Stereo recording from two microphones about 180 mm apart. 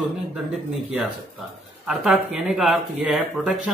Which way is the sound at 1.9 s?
Centre (ahead or behind).